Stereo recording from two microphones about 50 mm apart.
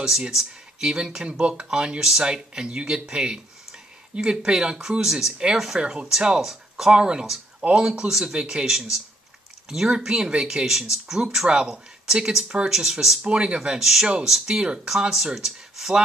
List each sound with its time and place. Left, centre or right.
0.0 s speech: centre
13.2 s speech: right
14.0 s speech: centre